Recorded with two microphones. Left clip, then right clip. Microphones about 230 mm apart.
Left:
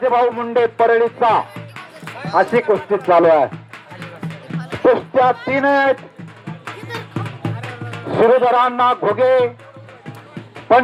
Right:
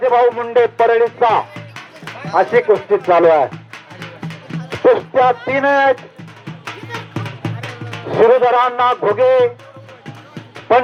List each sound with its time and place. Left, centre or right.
0.0 s speech: right
4.0 s music: right
4.7 s speech: right
6.4 s music: right
10.7 s speech: right